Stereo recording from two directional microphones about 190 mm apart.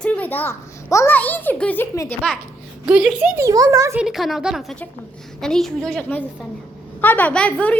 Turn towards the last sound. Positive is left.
turn(degrees=10)  # may be behind; listen again after turning